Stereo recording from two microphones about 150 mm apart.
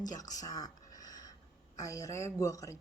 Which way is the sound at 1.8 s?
20° left (ahead or behind).